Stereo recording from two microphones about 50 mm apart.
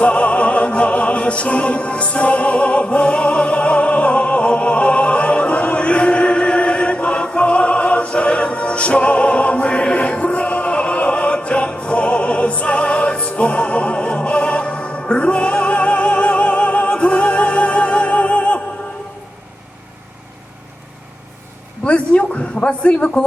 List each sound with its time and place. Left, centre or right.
0.0 s music: left
21.8 s a man's voice: left